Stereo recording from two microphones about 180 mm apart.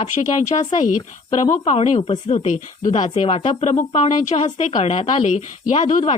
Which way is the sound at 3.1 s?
35° left (ahead or behind).